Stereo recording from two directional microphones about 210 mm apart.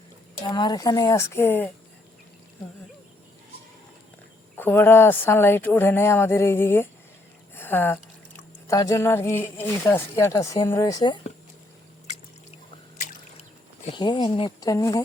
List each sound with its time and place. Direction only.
0.4 s speech: 20° left (ahead or behind)
4.5 s speech: 10° left (ahead or behind)
7.5 s a sound: 10° left (ahead or behind)
8.6 s speech: 15° left (ahead or behind)
13.8 s speech: 20° left (ahead or behind)